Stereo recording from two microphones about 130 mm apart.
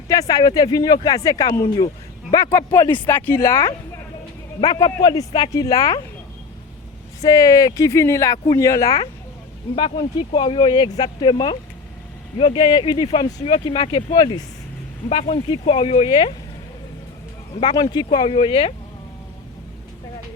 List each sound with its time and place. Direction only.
0.1 s speech: 30° left (ahead or behind)
7.2 s speech: 30° left (ahead or behind)
9.7 s speech: 40° left (ahead or behind)
15.3 s speech: 45° left (ahead or behind)
17.5 s speech: 40° left (ahead or behind)